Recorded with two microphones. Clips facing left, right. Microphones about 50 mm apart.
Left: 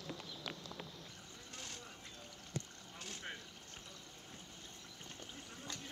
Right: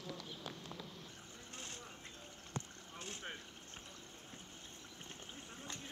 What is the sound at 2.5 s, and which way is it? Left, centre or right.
Rowboat, right.